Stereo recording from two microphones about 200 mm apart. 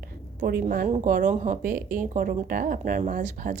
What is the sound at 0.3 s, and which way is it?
A woman's voice, 50° right (ahead or behind).